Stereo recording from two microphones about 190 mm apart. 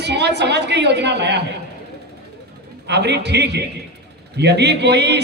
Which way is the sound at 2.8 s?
60° right (ahead or behind).